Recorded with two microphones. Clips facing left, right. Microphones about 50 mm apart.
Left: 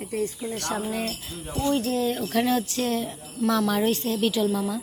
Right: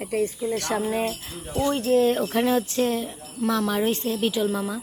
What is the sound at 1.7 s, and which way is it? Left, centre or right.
Speech, right.